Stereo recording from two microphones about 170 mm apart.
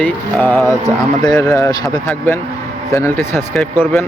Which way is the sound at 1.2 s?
20° left (ahead or behind).